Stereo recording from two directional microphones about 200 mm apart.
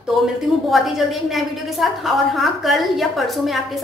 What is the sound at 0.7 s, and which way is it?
A woman's voice, centre (ahead or behind).